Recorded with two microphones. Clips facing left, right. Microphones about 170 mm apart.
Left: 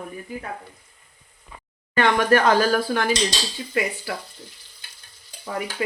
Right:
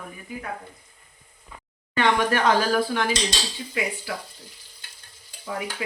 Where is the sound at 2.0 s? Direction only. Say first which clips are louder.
Left 3 dB; 45° left (ahead or behind).